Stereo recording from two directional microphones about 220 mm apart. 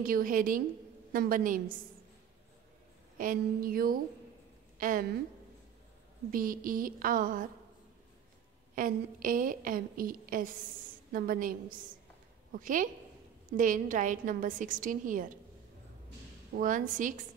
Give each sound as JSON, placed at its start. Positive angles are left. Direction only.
{"t": 0.0, "sound": "a woman's voice", "side_deg": -40}
{"t": 3.2, "sound": "a woman's voice", "side_deg": -40}
{"t": 6.3, "sound": "a woman's voice", "side_deg": -40}
{"t": 8.7, "sound": "a woman's voice", "side_deg": -40}
{"t": 16.5, "sound": "a woman's voice", "side_deg": -35}